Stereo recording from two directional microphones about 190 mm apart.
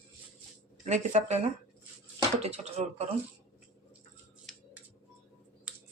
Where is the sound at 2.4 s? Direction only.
35° right (ahead or behind).